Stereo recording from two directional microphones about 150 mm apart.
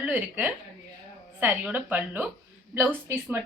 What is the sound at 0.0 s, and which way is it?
A woman's voice, 10° right (ahead or behind).